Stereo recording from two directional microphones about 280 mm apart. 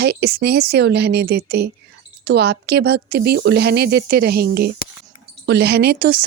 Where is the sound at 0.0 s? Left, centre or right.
Right.